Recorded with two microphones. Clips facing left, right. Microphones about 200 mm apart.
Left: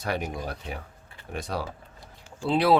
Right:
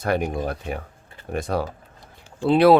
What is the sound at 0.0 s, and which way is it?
Speech, 50° right (ahead or behind).